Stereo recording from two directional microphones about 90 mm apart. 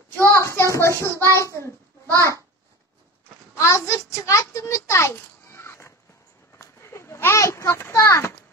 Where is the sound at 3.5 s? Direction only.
35° left (ahead or behind).